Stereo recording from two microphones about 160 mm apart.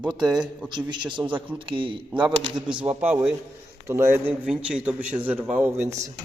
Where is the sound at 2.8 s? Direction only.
10° right (ahead or behind).